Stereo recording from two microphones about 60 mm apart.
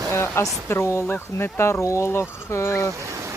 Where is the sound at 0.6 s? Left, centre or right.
Left.